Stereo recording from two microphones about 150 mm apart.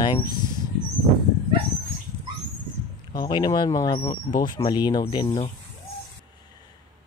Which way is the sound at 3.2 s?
30° left (ahead or behind).